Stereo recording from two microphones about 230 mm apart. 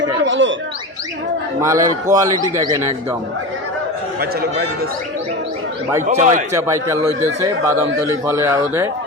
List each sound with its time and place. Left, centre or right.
0.3 s speech: right
1.6 s speech: centre
6.1 s speech: right
6.5 s speech: centre